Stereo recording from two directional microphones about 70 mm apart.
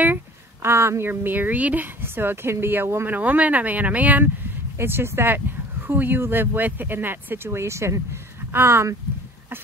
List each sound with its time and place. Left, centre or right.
0.0 s a woman's voice: right
2.0 s speech: right
3.2 s speech: right
4.7 s speech: right